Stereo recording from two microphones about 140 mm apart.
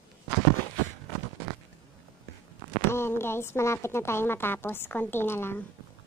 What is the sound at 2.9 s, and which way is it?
Speech, 15° left (ahead or behind).